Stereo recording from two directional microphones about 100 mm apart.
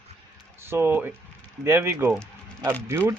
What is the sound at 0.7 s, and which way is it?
Speech, 25° right (ahead or behind).